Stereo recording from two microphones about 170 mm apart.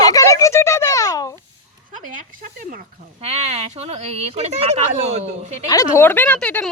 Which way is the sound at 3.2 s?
35° right (ahead or behind).